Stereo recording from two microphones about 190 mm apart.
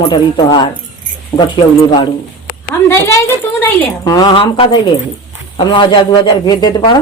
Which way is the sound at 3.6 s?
20° left (ahead or behind).